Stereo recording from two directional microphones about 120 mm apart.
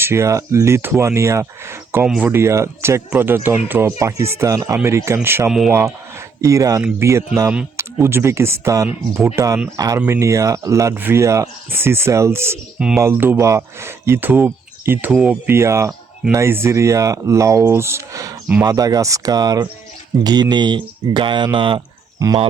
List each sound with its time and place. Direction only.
0.0 s speech: 20° right (ahead or behind)
2.0 s speech: 5° right (ahead or behind)
2.3 s speech: 25° right (ahead or behind)
5.5 s speech: 5° right (ahead or behind)
6.4 s speech: 30° right (ahead or behind); by 15.4 s 10° right (ahead or behind)
15.4 s speech: 20° right (ahead or behind); by 21.8 s 40° right (ahead or behind)